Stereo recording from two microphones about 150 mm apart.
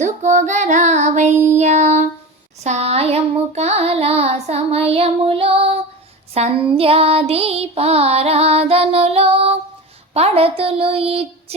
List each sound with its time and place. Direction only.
0.0 s child singing: 55° right (ahead or behind); by 5.8 s 40° right (ahead or behind)
6.3 s music: 40° right (ahead or behind)